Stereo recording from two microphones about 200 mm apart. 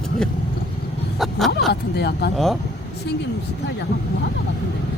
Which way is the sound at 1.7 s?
55° left (ahead or behind).